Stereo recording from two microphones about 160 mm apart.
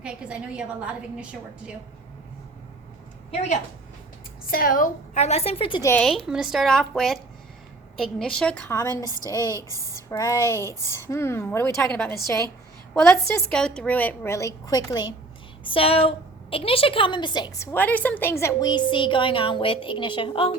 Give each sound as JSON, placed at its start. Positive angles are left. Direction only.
{"t": 0.0, "sound": "a woman's voice", "side_deg": -5}
{"t": 4.5, "sound": "a woman's voice", "side_deg": 60}
{"t": 6.0, "sound": "a woman's voice", "side_deg": 0}
{"t": 8.7, "sound": "a woman's voice", "side_deg": 20}
{"t": 9.5, "sound": "speech", "side_deg": -20}
{"t": 10.1, "sound": "a woman's voice", "side_deg": 20}
{"t": 15.6, "sound": "a woman's voice", "side_deg": 35}
{"t": 18.7, "sound": "a woman's voice", "side_deg": 30}